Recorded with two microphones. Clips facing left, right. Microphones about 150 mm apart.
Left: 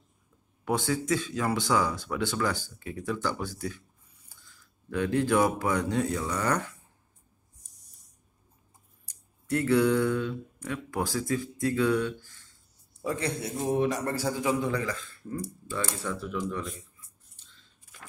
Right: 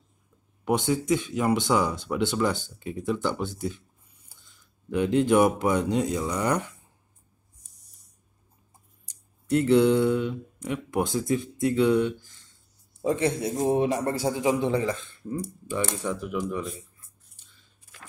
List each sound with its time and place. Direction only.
0.7 s speech: 20° right (ahead or behind)
9.5 s a man's voice: 20° right (ahead or behind)